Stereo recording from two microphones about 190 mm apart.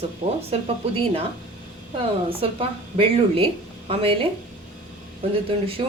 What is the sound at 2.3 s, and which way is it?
A woman's voice, 30° right (ahead or behind).